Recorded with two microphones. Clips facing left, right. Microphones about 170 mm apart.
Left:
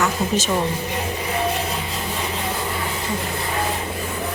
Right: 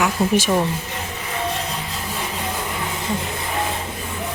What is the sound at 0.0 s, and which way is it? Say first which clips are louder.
Speech: right 2 dB; 10° right (ahead or behind).